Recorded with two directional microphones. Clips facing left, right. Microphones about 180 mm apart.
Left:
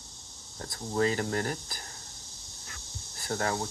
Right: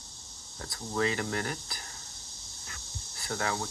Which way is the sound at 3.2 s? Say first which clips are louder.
Left 2 dB; 40° left (ahead or behind).